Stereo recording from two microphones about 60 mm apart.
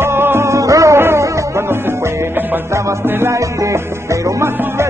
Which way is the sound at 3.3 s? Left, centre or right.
Right.